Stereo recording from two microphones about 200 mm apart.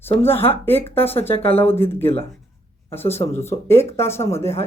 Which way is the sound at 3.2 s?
15° left (ahead or behind).